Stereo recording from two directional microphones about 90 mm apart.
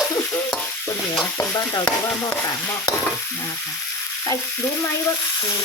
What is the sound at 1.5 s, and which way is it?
Speech, 40° left (ahead or behind).